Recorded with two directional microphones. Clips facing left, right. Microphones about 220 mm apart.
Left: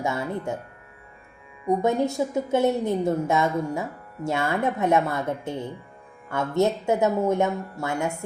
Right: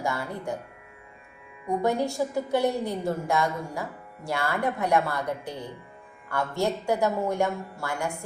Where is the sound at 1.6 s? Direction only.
20° left (ahead or behind).